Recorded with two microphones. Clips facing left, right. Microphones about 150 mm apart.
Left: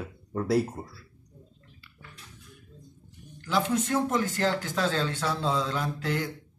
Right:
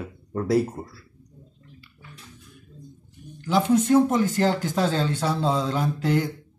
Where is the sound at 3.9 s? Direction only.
20° right (ahead or behind).